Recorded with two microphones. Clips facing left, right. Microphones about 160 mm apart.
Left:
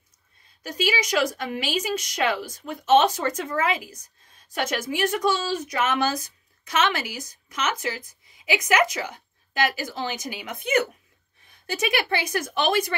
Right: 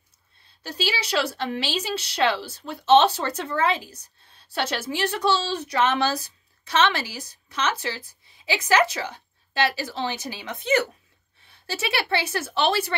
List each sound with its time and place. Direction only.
0.7 s a woman's voice: 30° right (ahead or behind)